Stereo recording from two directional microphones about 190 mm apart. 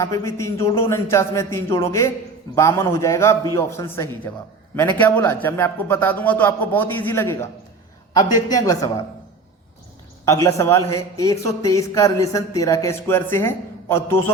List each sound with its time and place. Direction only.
0.0 s a man's voice: 15° left (ahead or behind)
10.2 s a man's voice: 15° left (ahead or behind)